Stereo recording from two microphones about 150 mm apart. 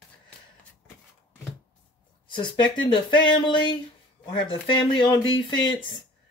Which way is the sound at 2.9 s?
35° left (ahead or behind).